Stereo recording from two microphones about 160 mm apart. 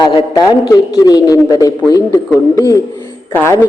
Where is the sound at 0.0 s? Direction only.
25° left (ahead or behind).